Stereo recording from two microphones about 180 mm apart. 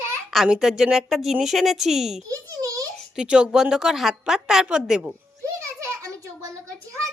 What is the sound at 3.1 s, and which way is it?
A woman's voice, 5° right (ahead or behind).